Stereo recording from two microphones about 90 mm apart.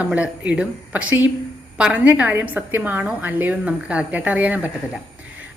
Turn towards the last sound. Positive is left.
turn(degrees=-15)  # may be behind; listen again after turning